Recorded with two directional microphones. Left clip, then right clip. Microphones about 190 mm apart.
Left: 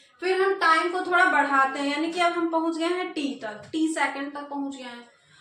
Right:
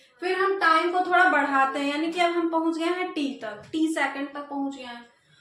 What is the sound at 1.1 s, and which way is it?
A woman's voice, 25° right (ahead or behind).